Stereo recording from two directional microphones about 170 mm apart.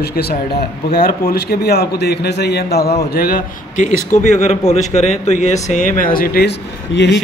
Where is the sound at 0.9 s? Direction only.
60° left (ahead or behind).